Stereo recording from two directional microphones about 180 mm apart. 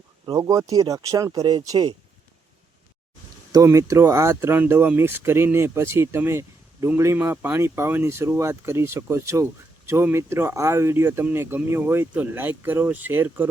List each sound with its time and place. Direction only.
0.3 s speech: 20° right (ahead or behind)
3.5 s speech: 15° right (ahead or behind)